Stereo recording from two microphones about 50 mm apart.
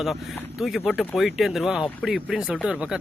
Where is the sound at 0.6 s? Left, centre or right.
Centre.